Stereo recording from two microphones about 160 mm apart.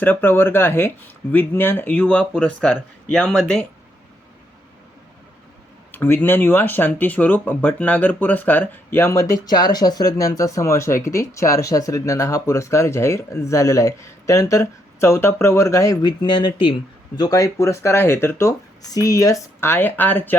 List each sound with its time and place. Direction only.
0.0 s speech: 10° left (ahead or behind)
5.9 s speech: 15° left (ahead or behind)